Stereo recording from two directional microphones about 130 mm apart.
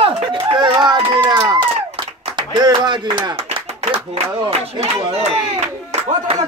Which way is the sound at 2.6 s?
35° right (ahead or behind).